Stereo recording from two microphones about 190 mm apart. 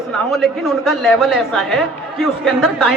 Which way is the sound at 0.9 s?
Centre (ahead or behind).